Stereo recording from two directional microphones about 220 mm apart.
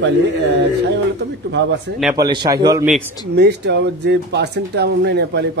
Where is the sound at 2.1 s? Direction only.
20° right (ahead or behind).